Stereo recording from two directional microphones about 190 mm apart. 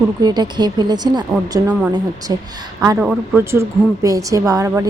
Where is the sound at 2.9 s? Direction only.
5° right (ahead or behind).